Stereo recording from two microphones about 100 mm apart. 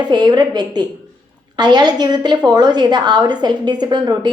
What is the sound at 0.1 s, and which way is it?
A woman's voice, 45° right (ahead or behind).